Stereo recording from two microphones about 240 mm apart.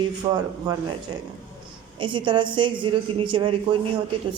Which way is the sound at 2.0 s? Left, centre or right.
Centre.